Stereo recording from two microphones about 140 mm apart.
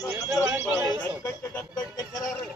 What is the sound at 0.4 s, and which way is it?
Horse, 10° right (ahead or behind).